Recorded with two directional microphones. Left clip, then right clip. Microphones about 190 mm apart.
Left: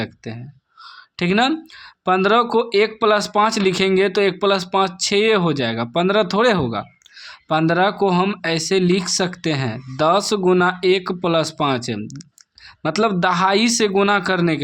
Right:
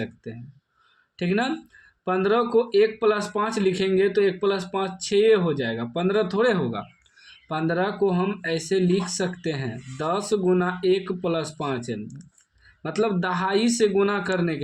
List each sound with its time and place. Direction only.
0.3 s speech: 40° left (ahead or behind)